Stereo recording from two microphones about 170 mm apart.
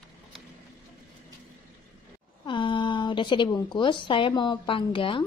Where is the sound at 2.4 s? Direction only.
30° left (ahead or behind).